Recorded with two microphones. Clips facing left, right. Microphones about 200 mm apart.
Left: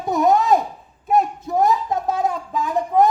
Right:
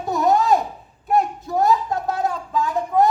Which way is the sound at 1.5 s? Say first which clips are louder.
Even; 20° left (ahead or behind).